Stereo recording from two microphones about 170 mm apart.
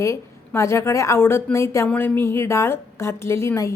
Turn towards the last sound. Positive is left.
turn(degrees=15)  # may be behind; listen again after turning